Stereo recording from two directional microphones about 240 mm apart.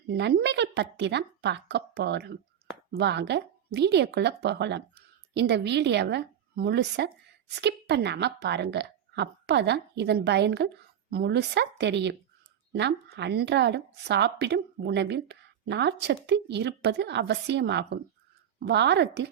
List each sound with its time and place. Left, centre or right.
0.1 s a woman's voice: right